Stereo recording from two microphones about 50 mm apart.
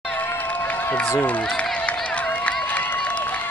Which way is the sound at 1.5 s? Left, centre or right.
Left.